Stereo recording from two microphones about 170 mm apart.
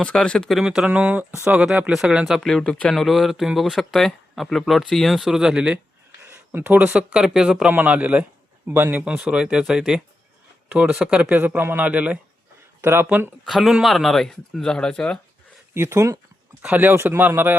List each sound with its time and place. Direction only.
0.0 s speech: 5° left (ahead or behind); by 13.3 s 10° right (ahead or behind)
13.4 s speech: centre (ahead or behind)
15.7 s speech: 15° right (ahead or behind)